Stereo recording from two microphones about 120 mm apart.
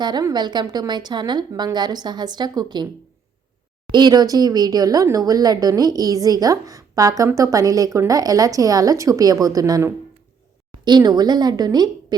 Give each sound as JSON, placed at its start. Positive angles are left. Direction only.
{"t": 0.0, "sound": "a woman's voice", "side_deg": -35}
{"t": 3.9, "sound": "a woman's voice", "side_deg": -35}